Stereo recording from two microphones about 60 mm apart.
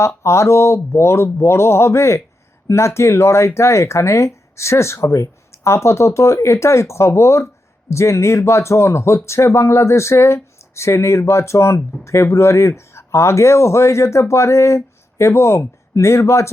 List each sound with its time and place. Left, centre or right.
0.2 s speech: left